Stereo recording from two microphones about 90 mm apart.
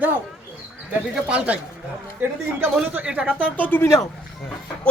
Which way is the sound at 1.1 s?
10° right (ahead or behind).